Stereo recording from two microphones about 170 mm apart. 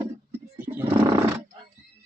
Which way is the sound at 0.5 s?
15° right (ahead or behind).